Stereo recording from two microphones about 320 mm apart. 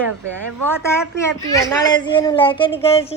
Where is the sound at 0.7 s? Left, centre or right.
Centre.